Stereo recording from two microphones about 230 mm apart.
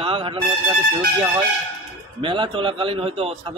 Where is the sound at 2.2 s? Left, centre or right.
Right.